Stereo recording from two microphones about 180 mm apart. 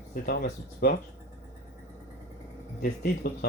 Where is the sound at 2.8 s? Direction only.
55° left (ahead or behind).